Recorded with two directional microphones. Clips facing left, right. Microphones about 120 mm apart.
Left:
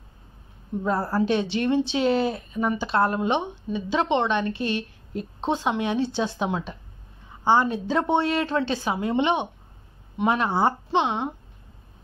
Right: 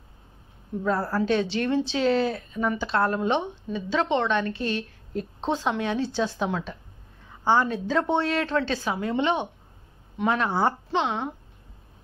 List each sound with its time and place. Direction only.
0.8 s speech: 20° left (ahead or behind)